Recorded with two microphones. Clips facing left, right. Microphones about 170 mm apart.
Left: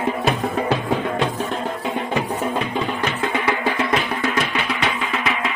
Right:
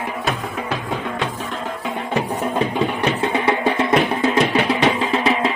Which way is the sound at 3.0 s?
25° right (ahead or behind).